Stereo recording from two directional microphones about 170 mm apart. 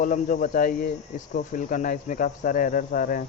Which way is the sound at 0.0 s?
55° left (ahead or behind).